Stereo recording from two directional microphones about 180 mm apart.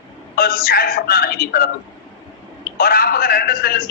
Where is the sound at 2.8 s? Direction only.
55° left (ahead or behind).